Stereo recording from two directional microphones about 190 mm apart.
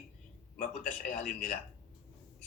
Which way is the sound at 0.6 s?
45° left (ahead or behind).